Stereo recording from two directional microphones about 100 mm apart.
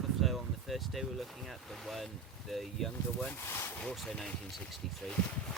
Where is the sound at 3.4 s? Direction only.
25° left (ahead or behind).